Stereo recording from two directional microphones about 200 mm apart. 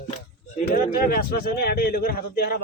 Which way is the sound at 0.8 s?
45° left (ahead or behind).